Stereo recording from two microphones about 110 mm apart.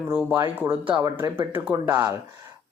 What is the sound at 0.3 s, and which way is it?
Speech, 20° right (ahead or behind).